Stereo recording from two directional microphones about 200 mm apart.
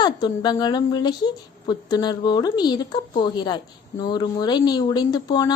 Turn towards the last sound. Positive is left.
turn(degrees=20)  # may be behind; listen again after turning